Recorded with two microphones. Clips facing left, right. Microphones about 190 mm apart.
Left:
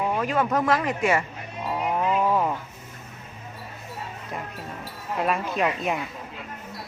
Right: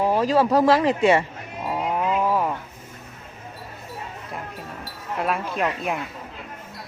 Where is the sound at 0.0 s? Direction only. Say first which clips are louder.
Right 5 dB; 30° right (ahead or behind).